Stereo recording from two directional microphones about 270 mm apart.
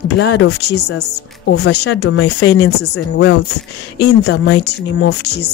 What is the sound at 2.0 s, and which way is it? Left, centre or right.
Speech, left.